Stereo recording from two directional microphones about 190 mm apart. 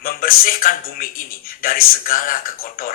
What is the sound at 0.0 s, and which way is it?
Speech, 50° left (ahead or behind).